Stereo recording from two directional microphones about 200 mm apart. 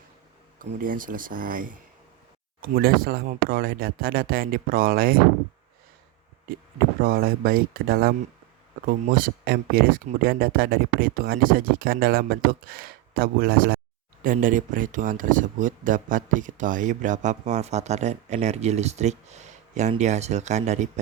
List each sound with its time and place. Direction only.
0.8 s speech: 45° right (ahead or behind)
7.0 s speech: 50° right (ahead or behind)